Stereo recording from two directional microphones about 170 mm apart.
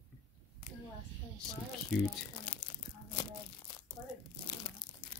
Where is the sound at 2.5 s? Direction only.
30° left (ahead or behind).